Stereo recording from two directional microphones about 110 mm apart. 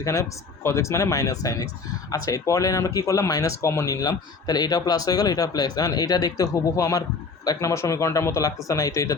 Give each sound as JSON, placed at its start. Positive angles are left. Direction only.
{"t": 0.0, "sound": "speech", "side_deg": 30}